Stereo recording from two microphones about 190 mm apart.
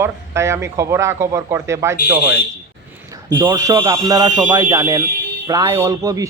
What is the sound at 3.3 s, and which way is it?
Speech, 25° right (ahead or behind).